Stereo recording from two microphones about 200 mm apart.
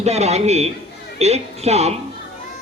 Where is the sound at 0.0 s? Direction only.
35° right (ahead or behind).